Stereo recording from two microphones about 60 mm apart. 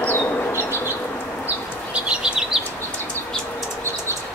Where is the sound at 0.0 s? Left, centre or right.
Left.